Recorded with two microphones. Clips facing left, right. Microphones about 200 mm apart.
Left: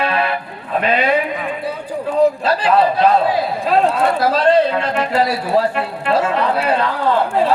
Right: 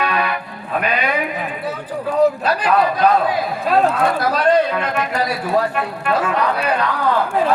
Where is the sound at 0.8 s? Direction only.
30° left (ahead or behind).